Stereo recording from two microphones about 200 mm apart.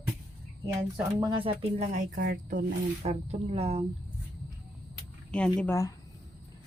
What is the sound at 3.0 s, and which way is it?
Speech, 30° right (ahead or behind).